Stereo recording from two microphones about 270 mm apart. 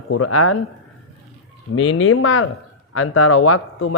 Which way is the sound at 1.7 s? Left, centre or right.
Left.